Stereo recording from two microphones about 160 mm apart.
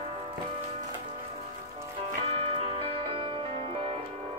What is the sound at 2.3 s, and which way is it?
Music, 35° right (ahead or behind).